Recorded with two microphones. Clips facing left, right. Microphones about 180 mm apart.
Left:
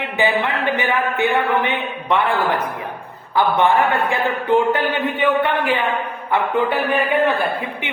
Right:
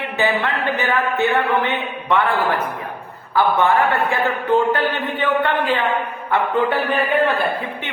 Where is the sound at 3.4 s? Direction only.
15° left (ahead or behind).